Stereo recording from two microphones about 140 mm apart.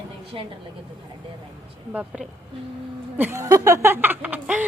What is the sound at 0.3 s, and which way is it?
Speech, 40° right (ahead or behind).